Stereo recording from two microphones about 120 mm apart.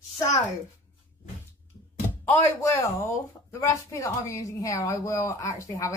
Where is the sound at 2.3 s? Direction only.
25° left (ahead or behind).